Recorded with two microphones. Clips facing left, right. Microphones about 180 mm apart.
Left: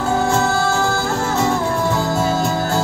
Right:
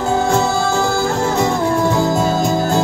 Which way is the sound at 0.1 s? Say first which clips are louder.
Right 2 dB; 15° right (ahead or behind).